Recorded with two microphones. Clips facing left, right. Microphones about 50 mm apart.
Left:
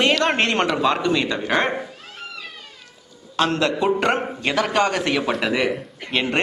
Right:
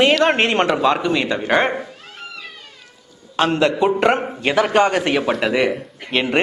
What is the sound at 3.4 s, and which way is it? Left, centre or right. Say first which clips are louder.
A man's voice: right 3 dB; centre.